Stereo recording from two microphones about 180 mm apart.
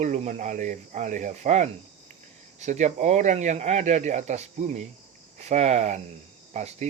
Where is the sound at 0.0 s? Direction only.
40° right (ahead or behind).